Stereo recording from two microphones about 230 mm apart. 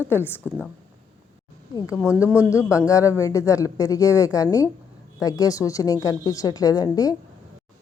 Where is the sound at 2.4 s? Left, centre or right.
Centre.